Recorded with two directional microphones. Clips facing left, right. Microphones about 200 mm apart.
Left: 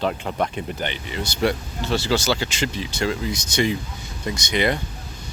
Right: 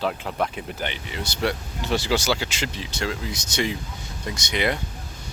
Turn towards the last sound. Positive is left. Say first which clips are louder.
# left 3 dB
turn(degrees=0)  # may be behind; listen again after turning